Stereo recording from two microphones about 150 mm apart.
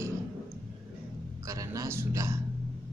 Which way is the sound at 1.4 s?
20° right (ahead or behind).